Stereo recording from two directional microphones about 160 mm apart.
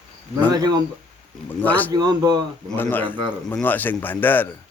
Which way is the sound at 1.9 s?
25° right (ahead or behind).